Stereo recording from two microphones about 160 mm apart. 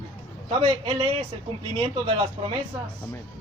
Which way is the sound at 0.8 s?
35° right (ahead or behind).